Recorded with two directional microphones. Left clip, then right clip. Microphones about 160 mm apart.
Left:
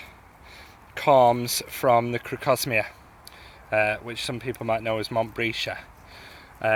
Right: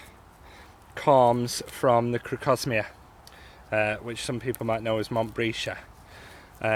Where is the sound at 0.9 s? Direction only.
30° right (ahead or behind).